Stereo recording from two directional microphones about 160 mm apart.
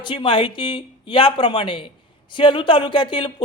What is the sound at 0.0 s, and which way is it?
A man's voice, 30° left (ahead or behind).